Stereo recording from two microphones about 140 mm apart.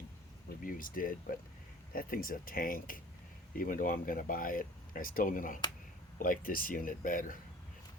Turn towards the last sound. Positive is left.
turn(degrees=75)  # may be behind; listen again after turning